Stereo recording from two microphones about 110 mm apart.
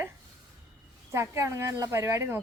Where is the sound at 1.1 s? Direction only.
25° right (ahead or behind).